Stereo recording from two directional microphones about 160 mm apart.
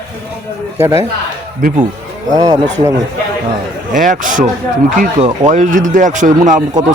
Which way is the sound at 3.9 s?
55° right (ahead or behind).